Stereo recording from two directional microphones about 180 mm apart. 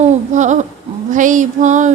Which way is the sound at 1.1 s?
45° right (ahead or behind).